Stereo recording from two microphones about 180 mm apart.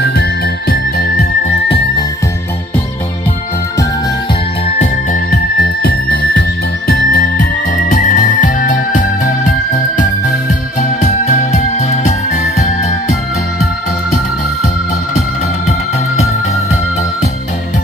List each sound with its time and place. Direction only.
0.0 s music: 65° left (ahead or behind)
5.3 s music: 60° left (ahead or behind); by 9.3 s 45° left (ahead or behind)
10.8 s music: 40° left (ahead or behind)